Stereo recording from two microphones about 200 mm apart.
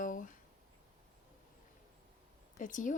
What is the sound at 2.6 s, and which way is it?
Speech, 40° left (ahead or behind).